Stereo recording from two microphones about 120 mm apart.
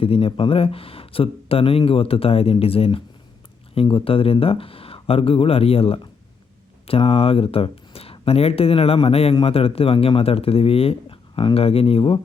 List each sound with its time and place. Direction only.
0.0 s speech: 50° left (ahead or behind)